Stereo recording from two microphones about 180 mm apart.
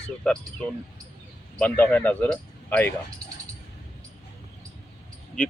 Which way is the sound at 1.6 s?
10° left (ahead or behind).